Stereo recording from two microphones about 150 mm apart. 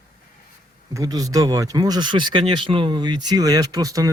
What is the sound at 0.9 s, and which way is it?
Speech, 25° right (ahead or behind).